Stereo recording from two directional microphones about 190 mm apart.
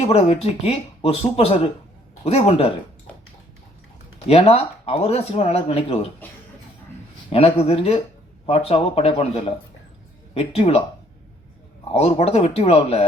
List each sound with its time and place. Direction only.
0.0 s speech: 30° left (ahead or behind)
4.3 s speech: 30° left (ahead or behind)
7.3 s speech: 30° left (ahead or behind)
11.9 s speech: 30° left (ahead or behind)